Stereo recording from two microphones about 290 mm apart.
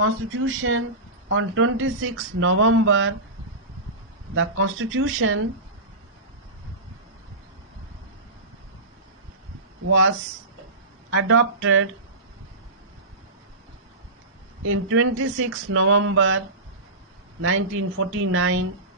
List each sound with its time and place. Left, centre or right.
0.0 s speech: right
4.4 s speech: right
11.1 s speech: right
14.7 s speech: right
17.4 s speech: right